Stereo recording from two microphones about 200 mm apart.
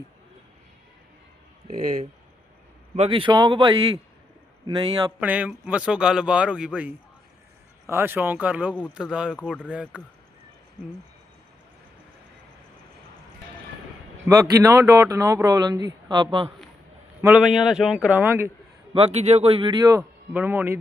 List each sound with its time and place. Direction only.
2.9 s speech: 30° right (ahead or behind)
5.2 s a man's voice: 5° right (ahead or behind)
7.9 s a man's voice: 10° right (ahead or behind)
14.3 s speech: 20° right (ahead or behind)
17.2 s a man's voice: 10° right (ahead or behind)
18.9 s speech: 30° right (ahead or behind); by 20.7 s 10° right (ahead or behind)